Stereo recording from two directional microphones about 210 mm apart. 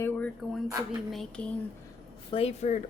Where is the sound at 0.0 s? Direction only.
5° left (ahead or behind).